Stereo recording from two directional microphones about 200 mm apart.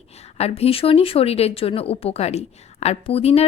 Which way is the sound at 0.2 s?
30° left (ahead or behind).